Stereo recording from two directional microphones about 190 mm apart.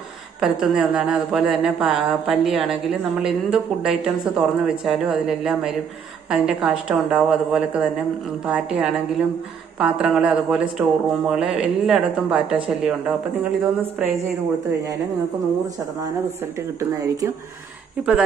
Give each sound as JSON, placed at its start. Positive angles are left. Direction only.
{"t": 0.4, "sound": "speech", "side_deg": -5}
{"t": 16.9, "sound": "speech", "side_deg": -20}
{"t": 18.0, "sound": "speech", "side_deg": -5}